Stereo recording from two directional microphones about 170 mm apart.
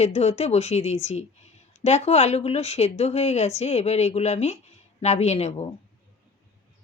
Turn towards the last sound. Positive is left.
turn(degrees=40)  # may be behind; listen again after turning